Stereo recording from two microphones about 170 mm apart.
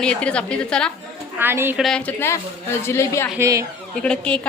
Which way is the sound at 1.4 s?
15° right (ahead or behind).